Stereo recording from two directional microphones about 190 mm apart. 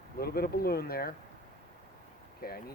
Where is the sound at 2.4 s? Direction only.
50° left (ahead or behind).